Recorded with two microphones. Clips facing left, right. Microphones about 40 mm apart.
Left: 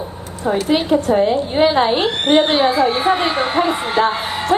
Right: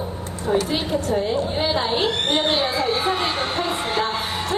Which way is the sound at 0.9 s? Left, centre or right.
Left.